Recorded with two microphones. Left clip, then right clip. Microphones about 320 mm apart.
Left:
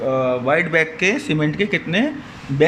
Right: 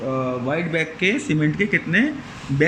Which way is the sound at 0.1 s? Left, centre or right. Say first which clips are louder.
Left 6 dB; left.